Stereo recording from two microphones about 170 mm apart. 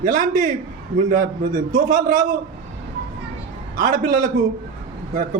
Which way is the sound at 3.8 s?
50° right (ahead or behind).